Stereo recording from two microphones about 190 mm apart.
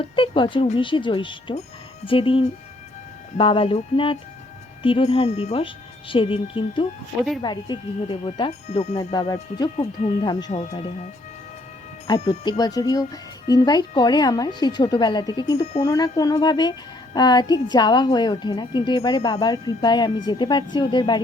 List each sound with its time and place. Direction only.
0.0 s a woman's voice: 25° left (ahead or behind)
9.1 s a woman's voice: 20° left (ahead or behind)
9.7 s speech: 35° left (ahead or behind)
12.1 s a woman's voice: 20° left (ahead or behind)